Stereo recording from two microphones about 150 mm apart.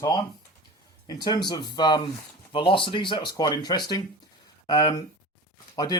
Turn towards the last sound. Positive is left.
turn(degrees=25)  # may be behind; listen again after turning